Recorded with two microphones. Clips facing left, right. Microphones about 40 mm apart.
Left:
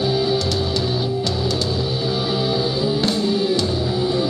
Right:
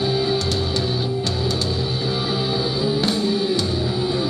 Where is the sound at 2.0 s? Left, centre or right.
Centre.